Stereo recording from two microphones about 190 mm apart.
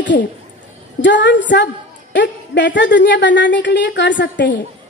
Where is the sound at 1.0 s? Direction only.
70° left (ahead or behind).